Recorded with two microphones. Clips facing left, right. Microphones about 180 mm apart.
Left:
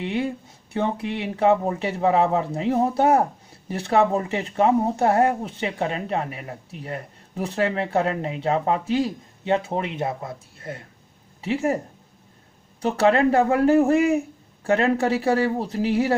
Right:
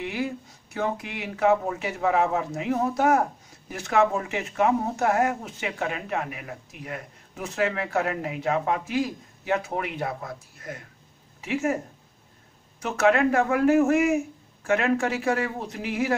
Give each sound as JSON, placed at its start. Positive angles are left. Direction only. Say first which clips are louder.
{"t": 0.0, "sound": "speech", "louder": "left 4 dB", "side_deg": 30}
{"t": 12.8, "sound": "speech", "louder": "left 3 dB", "side_deg": 30}